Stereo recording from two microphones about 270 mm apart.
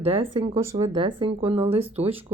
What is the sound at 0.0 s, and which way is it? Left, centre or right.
Speech, right.